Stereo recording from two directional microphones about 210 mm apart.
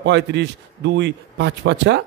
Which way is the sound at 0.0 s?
55° right (ahead or behind).